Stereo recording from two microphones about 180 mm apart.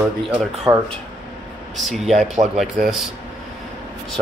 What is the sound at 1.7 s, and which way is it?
Speech, centre (ahead or behind).